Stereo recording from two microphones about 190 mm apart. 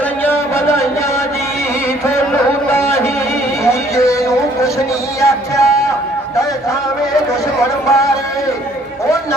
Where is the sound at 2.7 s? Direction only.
15° left (ahead or behind).